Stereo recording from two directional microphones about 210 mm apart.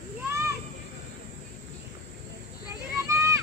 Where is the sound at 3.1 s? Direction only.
15° right (ahead or behind).